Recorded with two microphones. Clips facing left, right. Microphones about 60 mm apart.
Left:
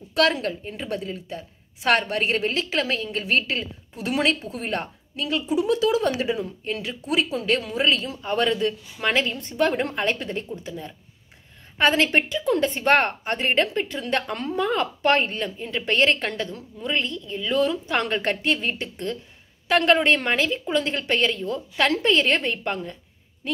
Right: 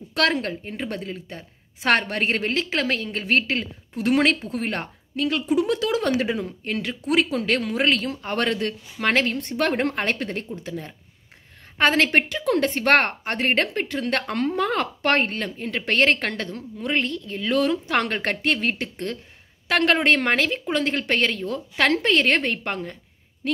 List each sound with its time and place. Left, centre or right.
0.1 s a woman's voice: right